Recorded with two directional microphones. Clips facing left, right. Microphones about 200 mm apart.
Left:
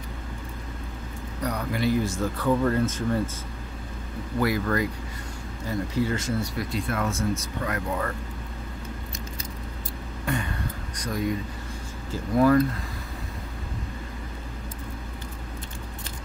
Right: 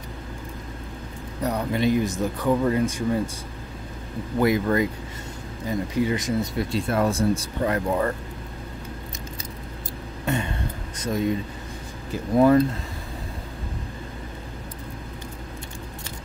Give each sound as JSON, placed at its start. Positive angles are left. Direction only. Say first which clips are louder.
{"t": 1.4, "sound": "speech", "louder": "right 4 dB", "side_deg": -25}
{"t": 4.4, "sound": "speech", "louder": "right 4 dB", "side_deg": -20}
{"t": 10.2, "sound": "vehicle", "louder": "right 3 dB", "side_deg": -25}
{"t": 11.0, "sound": "speech", "louder": "right 4 dB", "side_deg": -25}